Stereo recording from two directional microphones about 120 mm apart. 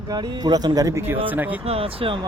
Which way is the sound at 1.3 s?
15° right (ahead or behind).